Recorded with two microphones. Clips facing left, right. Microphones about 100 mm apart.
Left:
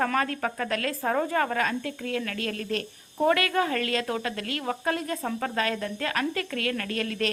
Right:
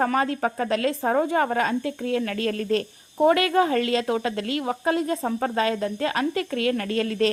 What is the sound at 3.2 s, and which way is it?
A woman's voice, 25° right (ahead or behind).